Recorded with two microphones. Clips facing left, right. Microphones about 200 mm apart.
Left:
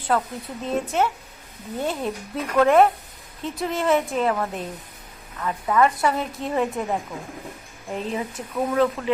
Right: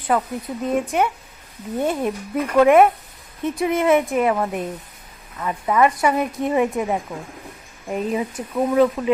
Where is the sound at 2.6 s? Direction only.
15° right (ahead or behind).